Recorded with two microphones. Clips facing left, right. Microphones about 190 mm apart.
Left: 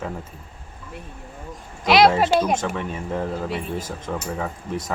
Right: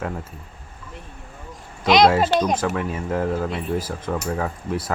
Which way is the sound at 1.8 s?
5° left (ahead or behind).